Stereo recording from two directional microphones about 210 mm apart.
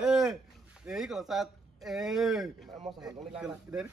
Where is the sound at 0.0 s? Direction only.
Centre (ahead or behind).